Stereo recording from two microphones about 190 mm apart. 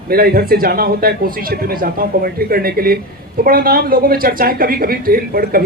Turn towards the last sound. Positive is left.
turn(degrees=-50)  # may be behind; listen again after turning